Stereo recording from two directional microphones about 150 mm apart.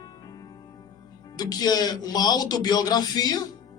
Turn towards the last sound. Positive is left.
turn(degrees=25)  # may be behind; listen again after turning